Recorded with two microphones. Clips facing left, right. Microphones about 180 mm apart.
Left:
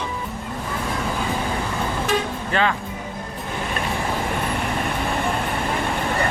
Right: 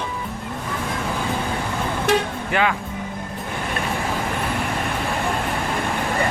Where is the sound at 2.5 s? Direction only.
10° right (ahead or behind).